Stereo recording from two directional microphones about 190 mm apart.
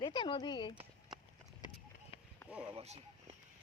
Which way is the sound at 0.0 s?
25° left (ahead or behind).